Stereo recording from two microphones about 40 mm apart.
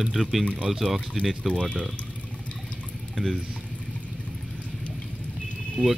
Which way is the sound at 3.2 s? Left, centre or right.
Centre.